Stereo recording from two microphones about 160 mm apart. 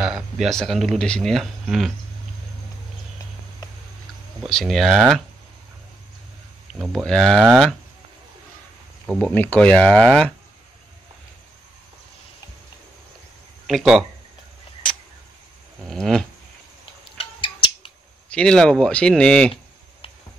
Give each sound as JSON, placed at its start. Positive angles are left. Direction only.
{"t": 0.0, "sound": "speech", "side_deg": -5}
{"t": 4.5, "sound": "speech", "side_deg": 0}
{"t": 6.7, "sound": "speech", "side_deg": 0}
{"t": 9.0, "sound": "speech", "side_deg": 5}
{"t": 13.7, "sound": "speech", "side_deg": 0}
{"t": 15.8, "sound": "speech", "side_deg": 0}
{"t": 17.2, "sound": "scissors", "side_deg": 30}
{"t": 18.3, "sound": "speech", "side_deg": 5}